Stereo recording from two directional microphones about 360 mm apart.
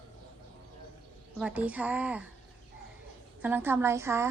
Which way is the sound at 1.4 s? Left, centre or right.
Centre.